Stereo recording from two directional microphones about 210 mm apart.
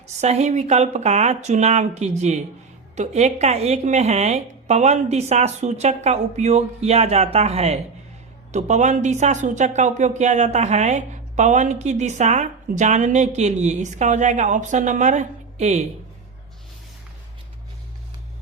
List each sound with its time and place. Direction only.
0.2 s a woman's voice: 30° right (ahead or behind)